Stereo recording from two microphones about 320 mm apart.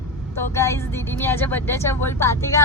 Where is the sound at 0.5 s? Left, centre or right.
Centre.